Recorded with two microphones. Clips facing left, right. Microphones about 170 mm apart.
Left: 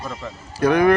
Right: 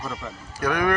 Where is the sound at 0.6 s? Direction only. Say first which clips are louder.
Left 7 dB; 25° left (ahead or behind).